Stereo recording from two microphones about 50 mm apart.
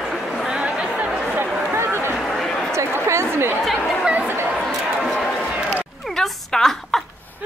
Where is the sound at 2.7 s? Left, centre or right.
Right.